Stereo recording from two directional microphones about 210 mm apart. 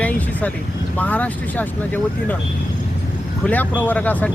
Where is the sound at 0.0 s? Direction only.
5° left (ahead or behind).